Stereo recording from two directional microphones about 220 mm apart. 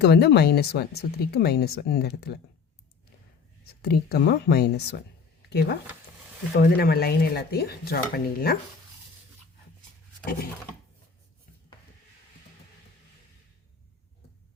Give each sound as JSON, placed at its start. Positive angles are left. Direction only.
{"t": 0.0, "sound": "speech", "side_deg": 50}
{"t": 3.8, "sound": "speech", "side_deg": 45}